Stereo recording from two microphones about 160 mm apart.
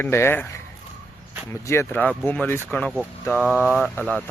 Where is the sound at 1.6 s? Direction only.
15° left (ahead or behind).